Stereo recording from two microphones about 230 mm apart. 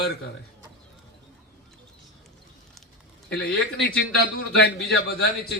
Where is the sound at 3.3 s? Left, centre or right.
Left.